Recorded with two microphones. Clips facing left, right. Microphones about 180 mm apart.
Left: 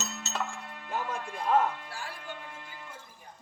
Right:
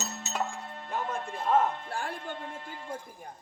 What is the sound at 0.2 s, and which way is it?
Music, 15° right (ahead or behind).